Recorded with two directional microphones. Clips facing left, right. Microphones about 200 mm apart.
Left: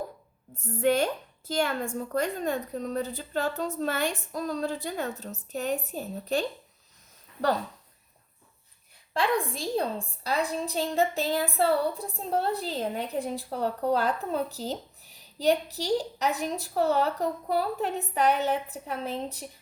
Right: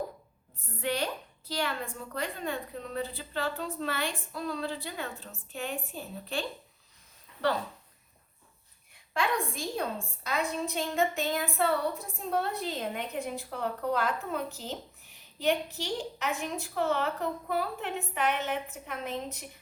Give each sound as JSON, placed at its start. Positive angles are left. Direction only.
{"t": 0.6, "sound": "a woman's voice", "side_deg": 45}
{"t": 9.1, "sound": "a woman's voice", "side_deg": 35}